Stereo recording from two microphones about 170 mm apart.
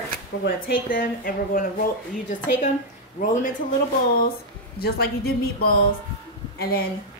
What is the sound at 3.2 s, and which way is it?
Speech, 45° left (ahead or behind).